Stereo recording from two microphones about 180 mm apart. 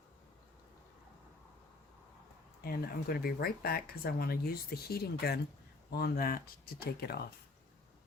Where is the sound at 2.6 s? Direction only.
60° left (ahead or behind).